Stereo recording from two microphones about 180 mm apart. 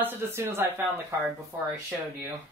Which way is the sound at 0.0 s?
15° right (ahead or behind).